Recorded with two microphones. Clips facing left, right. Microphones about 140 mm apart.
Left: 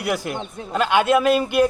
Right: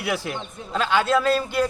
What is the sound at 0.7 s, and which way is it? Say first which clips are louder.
Speech: left 3 dB; 15° left (ahead or behind).